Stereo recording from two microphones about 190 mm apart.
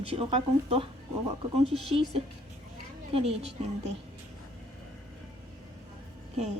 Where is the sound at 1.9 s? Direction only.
35° right (ahead or behind).